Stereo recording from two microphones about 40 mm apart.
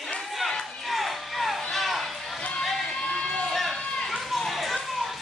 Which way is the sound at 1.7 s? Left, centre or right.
Centre.